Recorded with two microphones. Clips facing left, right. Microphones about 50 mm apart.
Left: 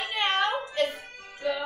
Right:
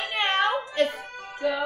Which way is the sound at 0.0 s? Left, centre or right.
Right.